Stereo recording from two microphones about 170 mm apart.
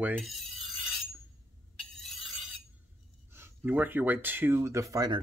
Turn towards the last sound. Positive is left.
turn(degrees=-20)  # may be behind; listen again after turning